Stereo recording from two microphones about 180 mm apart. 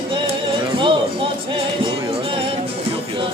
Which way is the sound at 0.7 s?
30° right (ahead or behind).